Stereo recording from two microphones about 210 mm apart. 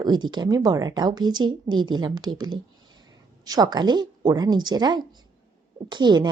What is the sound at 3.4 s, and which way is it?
A woman's voice, 20° right (ahead or behind).